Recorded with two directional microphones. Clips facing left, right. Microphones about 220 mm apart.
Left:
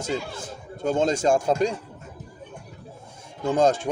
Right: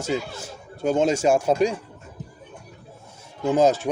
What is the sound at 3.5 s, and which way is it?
Speech, 5° right (ahead or behind).